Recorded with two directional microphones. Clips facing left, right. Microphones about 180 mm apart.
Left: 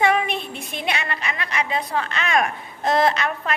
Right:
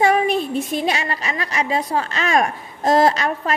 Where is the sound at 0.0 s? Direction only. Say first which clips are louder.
Right 4 dB; 40° right (ahead or behind).